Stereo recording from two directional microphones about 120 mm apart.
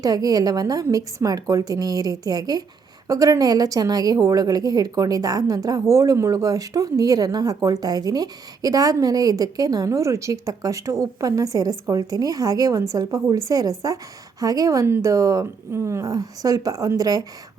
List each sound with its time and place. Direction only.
0.0 s a woman's voice: 30° right (ahead or behind)